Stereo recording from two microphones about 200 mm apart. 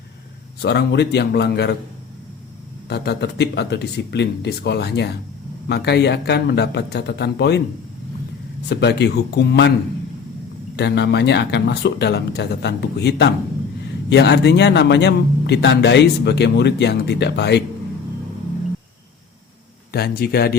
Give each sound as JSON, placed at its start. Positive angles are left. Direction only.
{"t": 0.6, "sound": "speech", "side_deg": 55}
{"t": 2.9, "sound": "speech", "side_deg": 55}
{"t": 8.7, "sound": "speech", "side_deg": 55}
{"t": 10.8, "sound": "speech", "side_deg": 60}
{"t": 19.9, "sound": "speech", "side_deg": 50}